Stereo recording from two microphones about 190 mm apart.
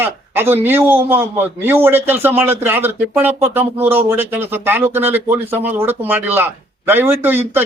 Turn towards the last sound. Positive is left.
turn(degrees=-10)  # may be behind; listen again after turning